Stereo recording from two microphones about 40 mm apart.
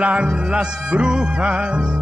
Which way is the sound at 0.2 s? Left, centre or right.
Right.